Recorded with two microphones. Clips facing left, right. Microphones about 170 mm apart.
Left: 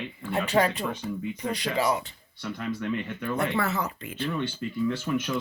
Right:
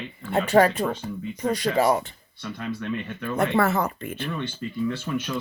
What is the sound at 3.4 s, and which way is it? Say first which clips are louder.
Speech: right 7 dB; 50° right (ahead or behind).